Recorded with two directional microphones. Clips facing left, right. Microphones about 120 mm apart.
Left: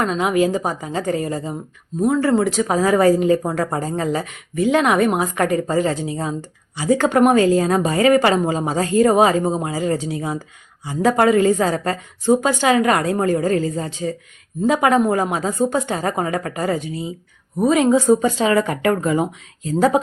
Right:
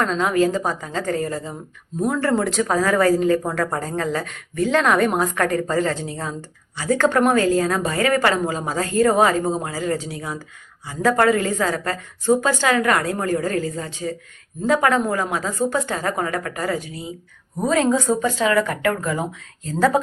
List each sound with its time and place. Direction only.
0.0 s speech: 10° left (ahead or behind)
2.0 s speech: 5° left (ahead or behind); by 14.1 s 30° left (ahead or behind)
14.7 s speech: 20° left (ahead or behind)